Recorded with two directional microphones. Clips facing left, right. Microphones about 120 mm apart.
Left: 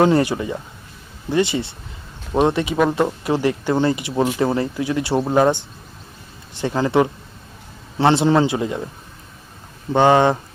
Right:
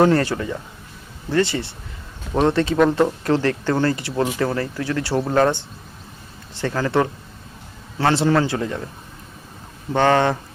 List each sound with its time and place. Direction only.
0.0 s speech: 15° left (ahead or behind)
9.9 s speech: 15° left (ahead or behind)